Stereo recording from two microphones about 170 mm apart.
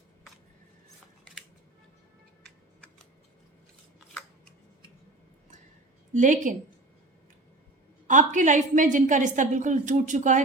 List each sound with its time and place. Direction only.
6.1 s a woman's voice: 45° right (ahead or behind)
8.0 s a woman's voice: 45° right (ahead or behind)